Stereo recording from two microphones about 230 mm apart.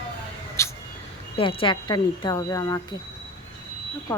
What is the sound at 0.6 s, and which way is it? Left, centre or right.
Cat, centre.